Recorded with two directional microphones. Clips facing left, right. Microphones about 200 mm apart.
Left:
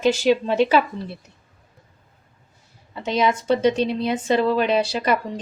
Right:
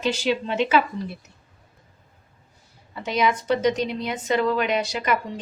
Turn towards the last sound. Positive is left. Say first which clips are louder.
# left 4 dB
turn(degrees=35)  # may be behind; listen again after turning